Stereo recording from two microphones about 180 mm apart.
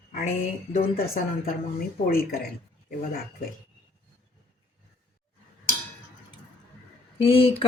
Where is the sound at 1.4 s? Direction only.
55° left (ahead or behind).